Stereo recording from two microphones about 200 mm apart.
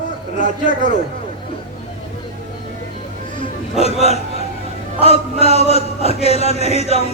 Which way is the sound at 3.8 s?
30° left (ahead or behind).